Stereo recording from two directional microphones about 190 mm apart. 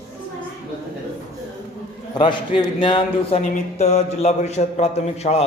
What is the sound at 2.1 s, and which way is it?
A man's voice, 25° left (ahead or behind).